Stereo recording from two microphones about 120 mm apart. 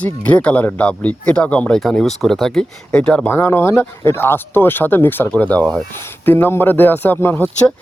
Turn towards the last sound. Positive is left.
turn(degrees=15)  # may be behind; listen again after turning